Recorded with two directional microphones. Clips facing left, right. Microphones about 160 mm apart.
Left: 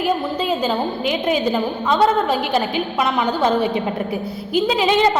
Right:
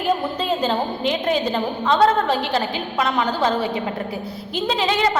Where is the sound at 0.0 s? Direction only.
5° left (ahead or behind).